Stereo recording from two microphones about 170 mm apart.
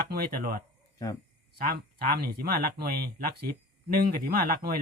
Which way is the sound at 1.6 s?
65° right (ahead or behind).